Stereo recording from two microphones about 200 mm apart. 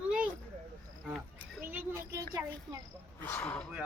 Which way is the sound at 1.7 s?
10° right (ahead or behind).